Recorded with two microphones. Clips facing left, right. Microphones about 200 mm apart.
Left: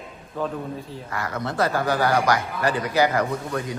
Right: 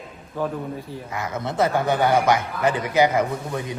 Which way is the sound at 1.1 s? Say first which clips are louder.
Right 1 dB; 20° right (ahead or behind).